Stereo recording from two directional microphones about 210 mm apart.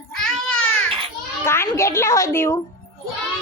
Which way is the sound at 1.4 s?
10° left (ahead or behind).